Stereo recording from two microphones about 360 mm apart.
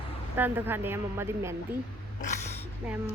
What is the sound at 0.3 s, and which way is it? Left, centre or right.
Speech, centre.